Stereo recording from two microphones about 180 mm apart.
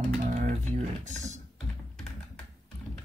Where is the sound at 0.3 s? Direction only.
45° right (ahead or behind).